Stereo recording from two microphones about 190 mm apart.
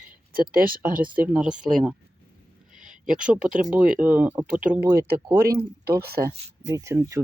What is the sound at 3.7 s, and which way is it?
Speech, 5° right (ahead or behind).